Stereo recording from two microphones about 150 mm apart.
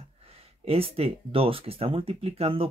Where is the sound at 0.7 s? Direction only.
40° right (ahead or behind).